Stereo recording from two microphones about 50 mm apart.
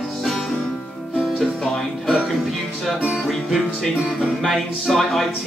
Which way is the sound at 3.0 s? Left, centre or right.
Right.